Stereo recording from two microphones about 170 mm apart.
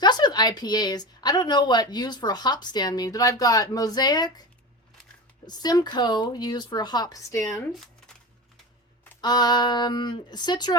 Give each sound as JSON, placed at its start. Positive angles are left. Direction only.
{"t": 0.0, "sound": "speech", "side_deg": 25}
{"t": 5.5, "sound": "speech", "side_deg": 25}
{"t": 9.2, "sound": "speech", "side_deg": 25}